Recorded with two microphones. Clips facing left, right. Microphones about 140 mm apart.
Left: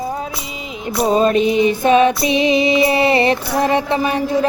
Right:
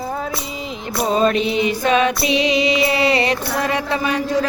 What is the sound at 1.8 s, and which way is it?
Mantra, 20° left (ahead or behind).